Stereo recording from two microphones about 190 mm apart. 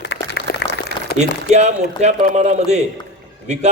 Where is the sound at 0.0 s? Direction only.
60° left (ahead or behind).